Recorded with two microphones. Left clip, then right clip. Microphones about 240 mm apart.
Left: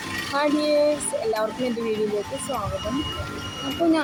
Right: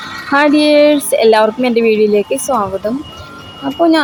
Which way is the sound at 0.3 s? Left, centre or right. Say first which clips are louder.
Right 12 dB; right.